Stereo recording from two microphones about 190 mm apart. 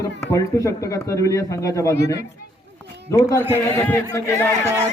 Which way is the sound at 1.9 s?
60° left (ahead or behind).